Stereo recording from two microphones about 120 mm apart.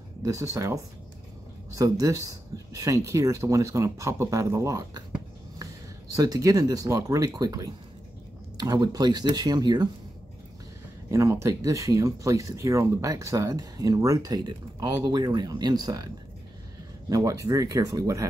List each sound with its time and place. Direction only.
0.2 s speech: 25° right (ahead or behind)
6.1 s speech: 30° right (ahead or behind)
11.1 s speech: 25° right (ahead or behind)
17.1 s speech: 30° right (ahead or behind)